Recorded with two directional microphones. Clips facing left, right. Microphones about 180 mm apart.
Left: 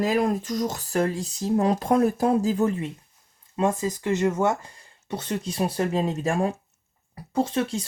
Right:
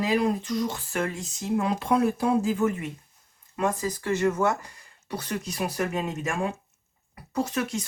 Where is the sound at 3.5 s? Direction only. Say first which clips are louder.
Left 3 dB; 20° left (ahead or behind).